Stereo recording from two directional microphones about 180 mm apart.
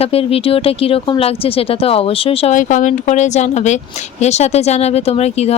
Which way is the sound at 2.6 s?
45° left (ahead or behind).